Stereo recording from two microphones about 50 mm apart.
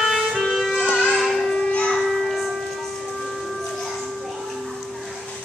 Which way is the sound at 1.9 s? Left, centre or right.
Centre.